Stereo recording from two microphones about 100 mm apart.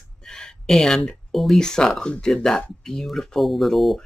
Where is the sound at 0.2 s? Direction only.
5° left (ahead or behind).